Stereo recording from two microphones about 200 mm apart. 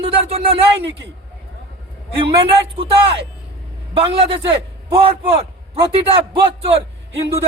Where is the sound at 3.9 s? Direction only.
25° right (ahead or behind).